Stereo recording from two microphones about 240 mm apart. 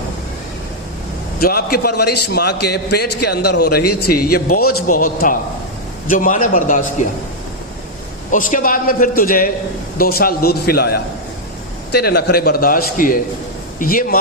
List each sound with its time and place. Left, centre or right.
1.4 s a man's voice: left
8.3 s a man's voice: left